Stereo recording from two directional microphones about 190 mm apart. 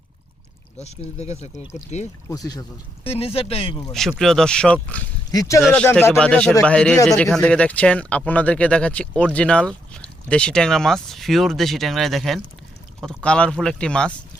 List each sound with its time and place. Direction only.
0.8 s speech: 35° left (ahead or behind)
2.3 s speech: 20° left (ahead or behind)
3.0 s speech: 30° left (ahead or behind)
4.2 s speech: centre (ahead or behind)
5.3 s speech: 15° left (ahead or behind)
5.6 s speech: 5° left (ahead or behind)